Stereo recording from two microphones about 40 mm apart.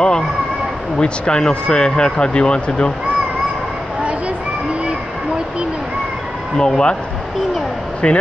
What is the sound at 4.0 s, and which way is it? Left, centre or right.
Children playing, right.